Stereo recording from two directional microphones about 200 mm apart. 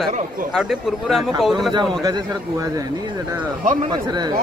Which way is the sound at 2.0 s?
15° right (ahead or behind).